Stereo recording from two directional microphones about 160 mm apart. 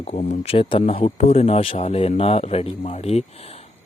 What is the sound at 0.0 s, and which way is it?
A man's voice, 40° left (ahead or behind).